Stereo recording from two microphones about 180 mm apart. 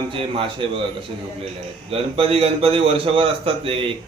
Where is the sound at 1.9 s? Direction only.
30° right (ahead or behind).